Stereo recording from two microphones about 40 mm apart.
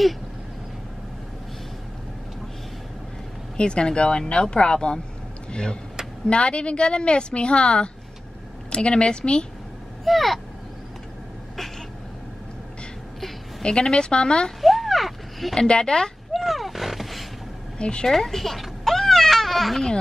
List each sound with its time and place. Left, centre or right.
3.5 s a woman's voice: left
10.0 s speech: centre
13.6 s a woman's voice: centre
14.6 s a sound: centre
15.5 s a woman's voice: left
16.3 s roaring cats: centre
17.7 s speech: left
18.0 s baby cry: centre